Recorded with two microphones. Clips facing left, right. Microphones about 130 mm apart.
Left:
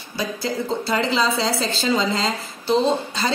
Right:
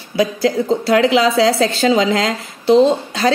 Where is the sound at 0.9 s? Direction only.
90° right.